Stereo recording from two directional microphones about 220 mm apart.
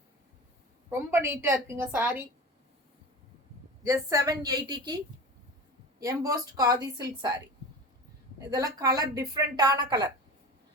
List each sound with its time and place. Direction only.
0.9 s a woman's voice: 10° right (ahead or behind)
3.8 s a woman's voice: 15° right (ahead or behind)
6.0 s a woman's voice: 15° right (ahead or behind)
8.4 s a woman's voice: 15° right (ahead or behind)